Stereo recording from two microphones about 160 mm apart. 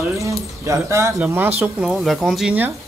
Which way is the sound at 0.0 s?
20° right (ahead or behind).